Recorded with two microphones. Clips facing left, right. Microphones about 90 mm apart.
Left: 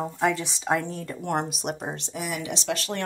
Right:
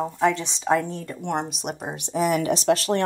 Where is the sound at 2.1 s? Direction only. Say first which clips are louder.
Right 13 dB; 45° right (ahead or behind).